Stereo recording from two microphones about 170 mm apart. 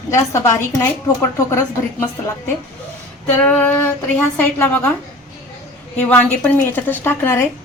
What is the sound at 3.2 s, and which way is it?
A woman's voice, 10° left (ahead or behind).